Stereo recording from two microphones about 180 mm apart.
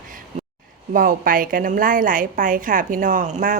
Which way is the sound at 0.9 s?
50° right (ahead or behind).